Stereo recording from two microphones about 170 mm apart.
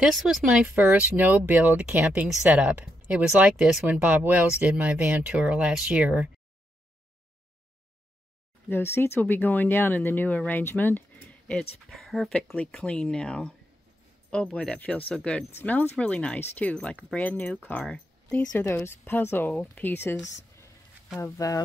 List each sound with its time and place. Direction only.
0.0 s speech: centre (ahead or behind)
8.6 s speech: 15° left (ahead or behind)